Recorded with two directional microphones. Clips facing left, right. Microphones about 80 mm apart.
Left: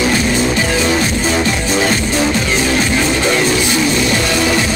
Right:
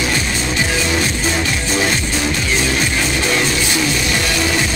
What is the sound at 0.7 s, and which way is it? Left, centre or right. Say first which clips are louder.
Music: left 4 dB; left.